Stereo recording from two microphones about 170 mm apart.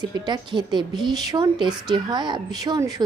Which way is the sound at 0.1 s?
25° right (ahead or behind).